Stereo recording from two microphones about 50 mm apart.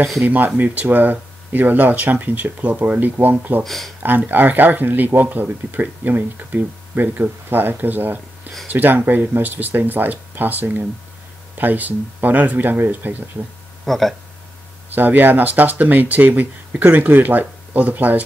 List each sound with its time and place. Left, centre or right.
0.2 s speech: right
3.6 s speech: centre
4.3 s speech: right
13.8 s speech: centre
15.0 s speech: right